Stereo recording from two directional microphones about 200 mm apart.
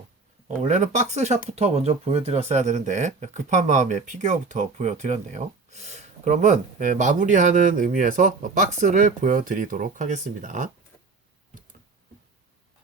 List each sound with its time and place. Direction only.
0.4 s speech: 35° right (ahead or behind)